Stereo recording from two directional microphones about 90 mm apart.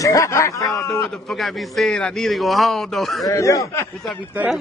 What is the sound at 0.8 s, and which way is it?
A man's voice, centre (ahead or behind).